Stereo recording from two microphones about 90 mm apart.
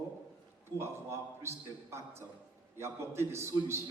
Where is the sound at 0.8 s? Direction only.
30° right (ahead or behind).